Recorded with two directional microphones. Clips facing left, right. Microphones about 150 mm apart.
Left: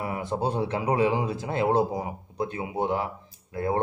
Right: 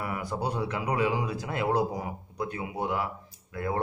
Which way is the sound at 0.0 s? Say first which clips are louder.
Left 3 dB; 25° left (ahead or behind).